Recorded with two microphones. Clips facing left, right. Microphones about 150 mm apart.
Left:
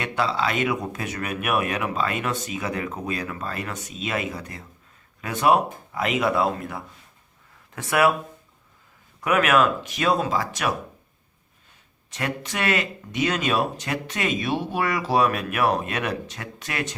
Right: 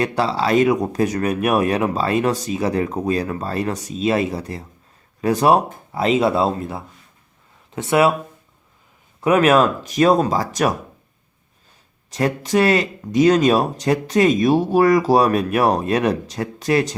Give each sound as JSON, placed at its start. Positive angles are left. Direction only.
{"t": 0.0, "sound": "speech", "side_deg": -35}
{"t": 9.2, "sound": "speech", "side_deg": -30}
{"t": 12.1, "sound": "speech", "side_deg": -40}